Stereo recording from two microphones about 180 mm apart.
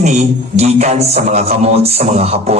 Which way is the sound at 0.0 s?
40° right (ahead or behind).